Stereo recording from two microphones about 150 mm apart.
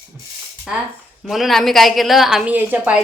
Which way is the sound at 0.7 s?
5° right (ahead or behind).